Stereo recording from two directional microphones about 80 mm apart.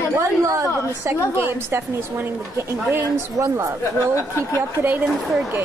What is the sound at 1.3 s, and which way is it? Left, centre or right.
A woman's voice, right.